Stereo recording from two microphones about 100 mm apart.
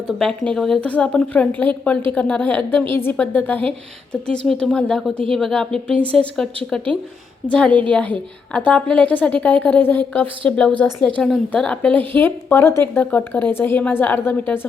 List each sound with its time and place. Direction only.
0.2 s a woman's voice: 5° left (ahead or behind)